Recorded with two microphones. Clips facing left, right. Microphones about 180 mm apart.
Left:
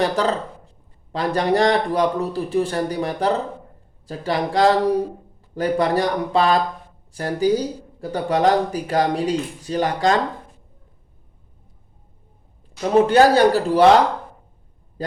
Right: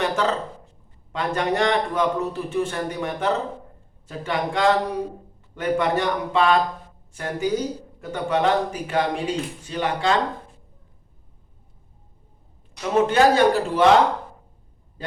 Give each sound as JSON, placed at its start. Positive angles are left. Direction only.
{"t": 0.0, "sound": "a man's voice", "side_deg": 35}
{"t": 13.1, "sound": "a man's voice", "side_deg": 35}